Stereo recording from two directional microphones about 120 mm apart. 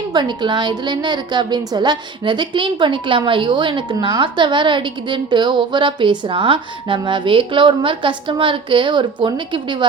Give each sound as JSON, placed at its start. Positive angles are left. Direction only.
{"t": 0.1, "sound": "a woman's voice", "side_deg": -40}